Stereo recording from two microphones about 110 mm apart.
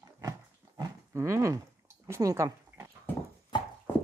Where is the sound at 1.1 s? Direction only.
25° right (ahead or behind).